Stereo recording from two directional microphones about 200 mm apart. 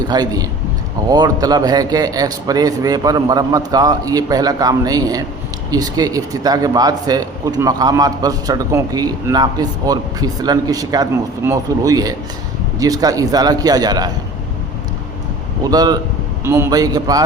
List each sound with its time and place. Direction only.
0.1 s a man's voice: 20° right (ahead or behind)
15.6 s a man's voice: 20° right (ahead or behind)